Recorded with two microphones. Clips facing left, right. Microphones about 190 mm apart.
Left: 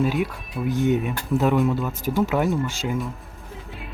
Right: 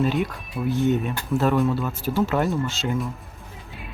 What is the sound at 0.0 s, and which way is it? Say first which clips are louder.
Speech: even; 10° left (ahead or behind).